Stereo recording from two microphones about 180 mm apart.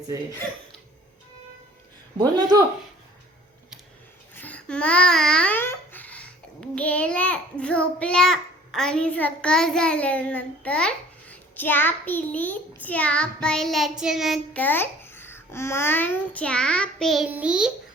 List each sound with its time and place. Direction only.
2.1 s speech: 20° right (ahead or behind)
4.4 s babbling: 10° left (ahead or behind)
7.6 s a child's voice: 5° left (ahead or behind)